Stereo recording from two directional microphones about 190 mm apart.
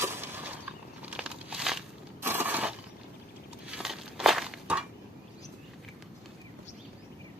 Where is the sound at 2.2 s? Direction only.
10° right (ahead or behind).